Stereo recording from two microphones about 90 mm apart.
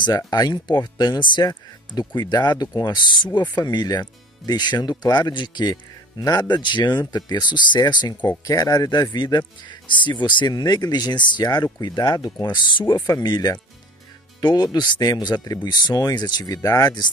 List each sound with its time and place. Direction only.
0.0 s speech: 50° left (ahead or behind)
8.5 s speech: 40° left (ahead or behind)